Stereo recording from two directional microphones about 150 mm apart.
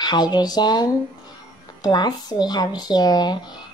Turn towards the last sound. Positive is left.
turn(degrees=25)  # may be behind; listen again after turning